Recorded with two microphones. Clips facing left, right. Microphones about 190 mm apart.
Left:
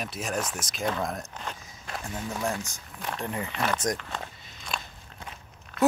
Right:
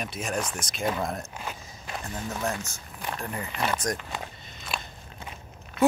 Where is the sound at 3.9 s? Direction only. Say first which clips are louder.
Right 1 dB; 10° right (ahead or behind).